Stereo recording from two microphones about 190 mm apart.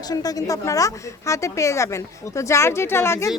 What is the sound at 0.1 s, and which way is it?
A woman's voice, 20° left (ahead or behind).